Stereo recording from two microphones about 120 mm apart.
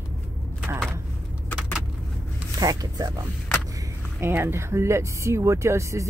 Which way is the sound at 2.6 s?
30° right (ahead or behind).